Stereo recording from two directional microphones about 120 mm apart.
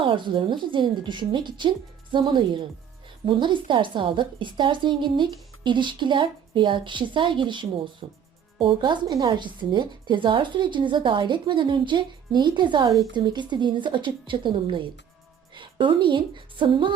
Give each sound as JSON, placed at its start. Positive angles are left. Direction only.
{"t": 0.0, "sound": "a woman's voice", "side_deg": -45}